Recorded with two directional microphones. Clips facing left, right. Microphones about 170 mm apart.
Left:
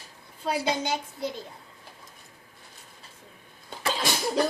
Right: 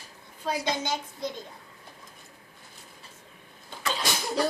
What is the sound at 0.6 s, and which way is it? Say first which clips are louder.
Speech: left 2 dB; 10° left (ahead or behind).